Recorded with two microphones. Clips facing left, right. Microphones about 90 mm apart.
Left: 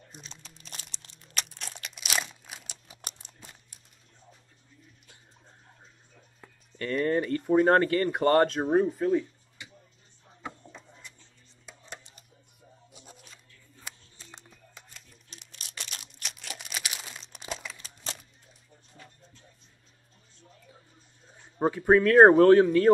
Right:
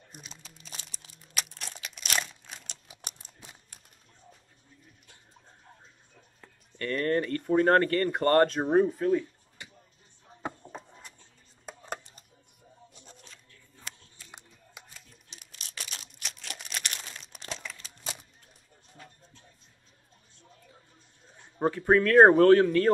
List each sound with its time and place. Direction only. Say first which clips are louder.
0.1 s crumpling: right 1 dB; 5° right (ahead or behind)
2.9 s a sound: left 1 dB; 5° right (ahead or behind)
6.8 s speech: left 1 dB; 5° left (ahead or behind)
10.4 s a sound: right 4 dB; 45° right (ahead or behind)
11.6 s chopping: right 7 dB; 45° right (ahead or behind)
12.9 s shuffling cards: left 1 dB; 10° left (ahead or behind)
14.3 s tearing: right 1 dB; 5° right (ahead or behind)
18.1 s a sound: even; 10° right (ahead or behind)
21.5 s speech: left 2 dB; 5° left (ahead or behind)